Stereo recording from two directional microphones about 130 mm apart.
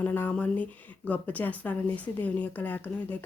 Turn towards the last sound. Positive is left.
turn(degrees=15)  # may be behind; listen again after turning